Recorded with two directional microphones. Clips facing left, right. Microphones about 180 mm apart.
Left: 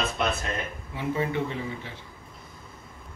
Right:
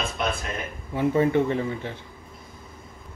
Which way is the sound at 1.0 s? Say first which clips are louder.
Right 7 dB; 50° right (ahead or behind).